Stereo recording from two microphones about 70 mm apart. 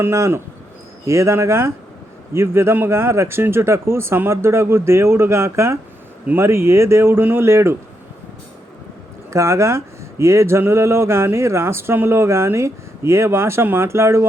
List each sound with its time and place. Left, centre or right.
0.0 s speech: right
9.3 s speech: right